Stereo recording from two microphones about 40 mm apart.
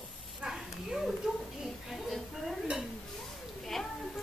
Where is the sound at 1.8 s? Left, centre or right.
Centre.